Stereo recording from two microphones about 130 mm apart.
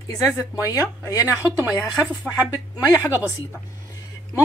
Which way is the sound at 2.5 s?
15° right (ahead or behind).